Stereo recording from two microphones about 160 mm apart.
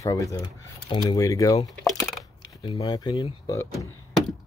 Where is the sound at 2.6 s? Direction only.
25° left (ahead or behind).